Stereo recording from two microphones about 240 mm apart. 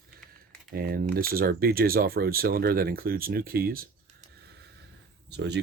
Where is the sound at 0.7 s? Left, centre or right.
Right.